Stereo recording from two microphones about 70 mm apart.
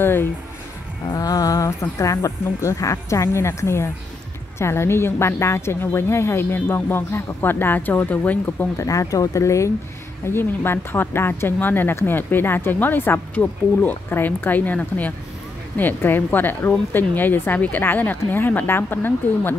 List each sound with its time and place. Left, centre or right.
0.0 s a woman's voice: left
1.1 s a woman's voice: left
8.7 s speech: left
10.2 s a woman's voice: left